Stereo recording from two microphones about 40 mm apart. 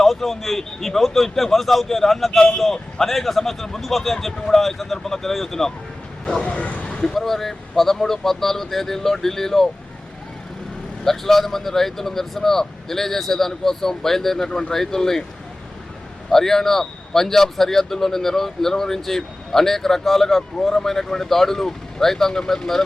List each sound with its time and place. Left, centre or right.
0.0 s speech: centre
6.4 s speech: left
7.1 s a man's voice: centre
11.0 s a man's voice: centre
16.3 s a man's voice: centre